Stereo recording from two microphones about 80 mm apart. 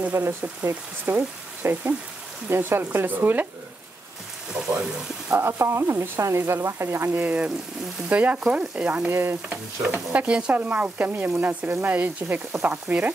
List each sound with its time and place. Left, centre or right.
0.1 s speech: right
0.7 s stir: right
4.6 s frying: centre
5.3 s speech: right
7.1 s stir: centre
10.1 s stir: centre
12.6 s frying: centre